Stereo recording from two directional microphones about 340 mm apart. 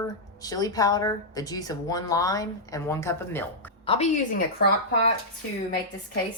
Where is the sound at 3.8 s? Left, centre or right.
Centre.